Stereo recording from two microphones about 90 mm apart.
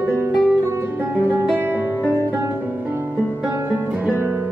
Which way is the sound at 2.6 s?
20° right (ahead or behind).